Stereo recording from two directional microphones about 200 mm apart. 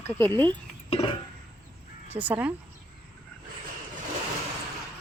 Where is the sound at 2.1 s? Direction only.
10° right (ahead or behind).